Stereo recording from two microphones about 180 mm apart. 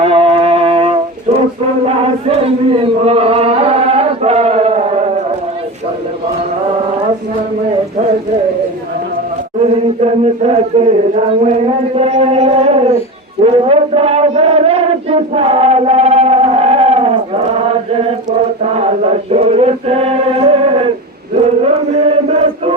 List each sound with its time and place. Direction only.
0.0 s wind instrument: 35° right (ahead or behind)
1.8 s chant: 35° right (ahead or behind)
9.6 s speech: 35° right (ahead or behind)
13.4 s a sound: 35° right (ahead or behind)
18.6 s chant: 35° right (ahead or behind)